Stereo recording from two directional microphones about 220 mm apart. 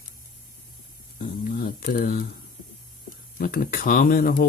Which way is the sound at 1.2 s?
40° left (ahead or behind).